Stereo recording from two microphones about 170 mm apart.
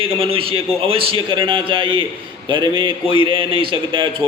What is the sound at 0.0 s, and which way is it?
Speech, 35° right (ahead or behind).